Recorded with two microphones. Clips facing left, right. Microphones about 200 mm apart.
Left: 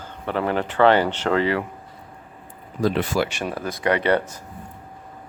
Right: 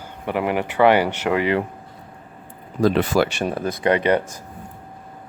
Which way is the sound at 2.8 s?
90° right.